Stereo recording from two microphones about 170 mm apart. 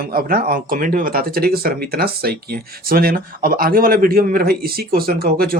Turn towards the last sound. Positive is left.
turn(degrees=-60)  # may be behind; listen again after turning